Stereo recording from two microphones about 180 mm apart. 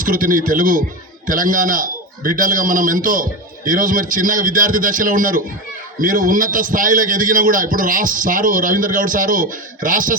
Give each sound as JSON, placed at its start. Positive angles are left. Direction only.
{"t": 0.0, "sound": "a man's voice", "side_deg": -50}